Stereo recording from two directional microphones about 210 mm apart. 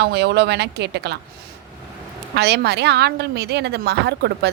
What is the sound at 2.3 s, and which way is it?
Speech, 50° right (ahead or behind).